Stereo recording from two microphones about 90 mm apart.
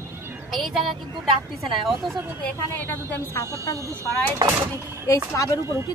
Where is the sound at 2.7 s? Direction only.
30° left (ahead or behind).